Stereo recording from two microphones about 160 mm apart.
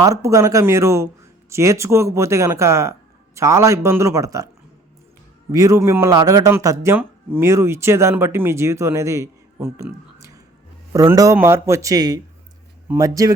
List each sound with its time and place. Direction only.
0.0 s a man's voice: 20° right (ahead or behind)
5.5 s a man's voice: 20° right (ahead or behind)